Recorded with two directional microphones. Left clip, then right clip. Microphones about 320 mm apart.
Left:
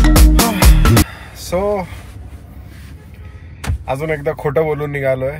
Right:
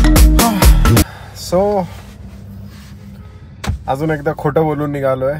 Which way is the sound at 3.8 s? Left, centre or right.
Centre.